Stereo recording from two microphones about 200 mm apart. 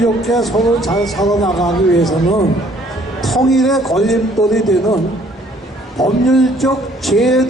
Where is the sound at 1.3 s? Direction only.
20° left (ahead or behind).